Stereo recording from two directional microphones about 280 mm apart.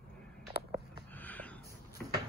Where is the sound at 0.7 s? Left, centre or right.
Centre.